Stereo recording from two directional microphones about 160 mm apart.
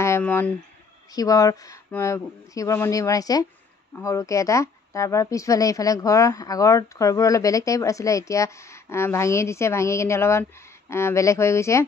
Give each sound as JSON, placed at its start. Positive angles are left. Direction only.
{"t": 0.0, "sound": "speech", "side_deg": 15}
{"t": 1.1, "sound": "a woman's voice", "side_deg": 20}